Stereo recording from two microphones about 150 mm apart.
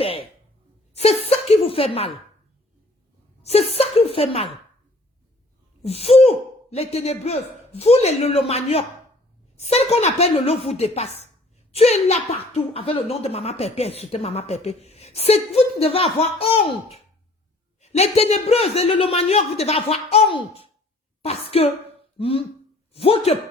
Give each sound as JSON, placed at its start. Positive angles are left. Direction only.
{"t": 0.0, "sound": "a sound", "side_deg": 40}
{"t": 0.9, "sound": "a man's voice", "side_deg": 45}
{"t": 3.4, "sound": "a man's voice", "side_deg": 45}
{"t": 5.8, "sound": "a woman's voice", "side_deg": 40}
{"t": 17.7, "sound": "a man's voice", "side_deg": 45}